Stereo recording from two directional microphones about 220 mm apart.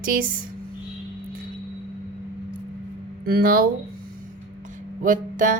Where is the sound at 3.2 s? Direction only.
40° right (ahead or behind).